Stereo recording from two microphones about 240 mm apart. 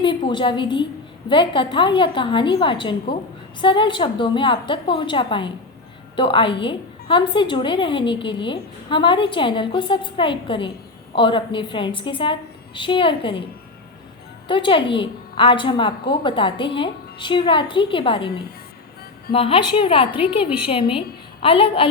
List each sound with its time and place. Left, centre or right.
0.0 s a woman's voice: centre
14.4 s a woman's voice: centre